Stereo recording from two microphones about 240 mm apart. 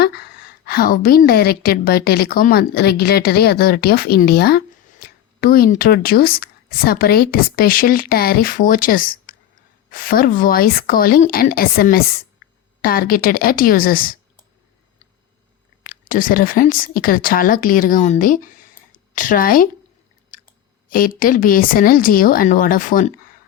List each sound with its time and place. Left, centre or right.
0.0 s a woman's voice: left
15.8 s a woman's voice: left
20.3 s clicking: left
20.9 s speech: left